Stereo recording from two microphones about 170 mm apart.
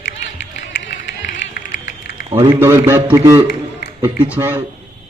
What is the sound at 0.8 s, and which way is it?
Music, 90° left.